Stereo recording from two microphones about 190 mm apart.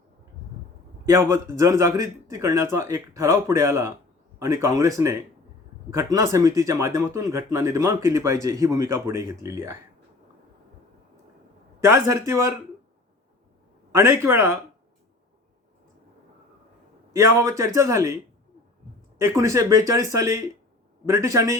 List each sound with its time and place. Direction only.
1.0 s speech: 15° right (ahead or behind)
11.8 s speech: 15° right (ahead or behind)
13.9 s speech: 15° right (ahead or behind)
17.1 s speech: 15° right (ahead or behind)
19.2 s speech: 15° right (ahead or behind)